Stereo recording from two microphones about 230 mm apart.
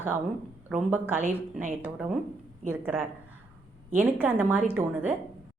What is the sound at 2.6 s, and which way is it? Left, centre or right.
A woman's voice, centre.